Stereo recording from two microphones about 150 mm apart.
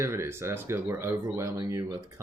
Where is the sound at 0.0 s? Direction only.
15° right (ahead or behind).